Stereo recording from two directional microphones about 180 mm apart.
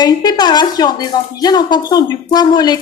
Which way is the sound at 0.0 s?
25° left (ahead or behind).